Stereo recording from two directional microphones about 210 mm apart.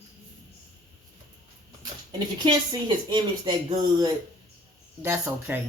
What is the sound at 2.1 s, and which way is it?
A woman's voice, 20° right (ahead or behind).